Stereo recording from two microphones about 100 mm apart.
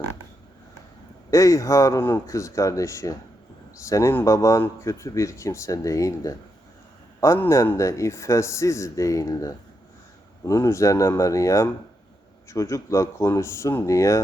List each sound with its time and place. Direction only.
1.3 s a man's voice: 30° left (ahead or behind)
7.3 s a man's voice: 25° left (ahead or behind)